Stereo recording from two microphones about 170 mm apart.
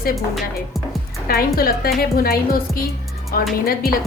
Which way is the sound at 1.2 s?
60° left (ahead or behind).